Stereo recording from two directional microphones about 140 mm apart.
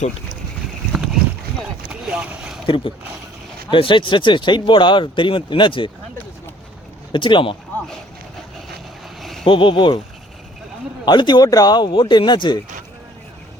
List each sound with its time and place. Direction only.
1.9 s vehicle: 10° right (ahead or behind)
2.6 s speech: 40° left (ahead or behind)
7.1 s speech: 35° left (ahead or behind)
9.4 s speech: 35° left (ahead or behind)
11.0 s speech: 35° left (ahead or behind)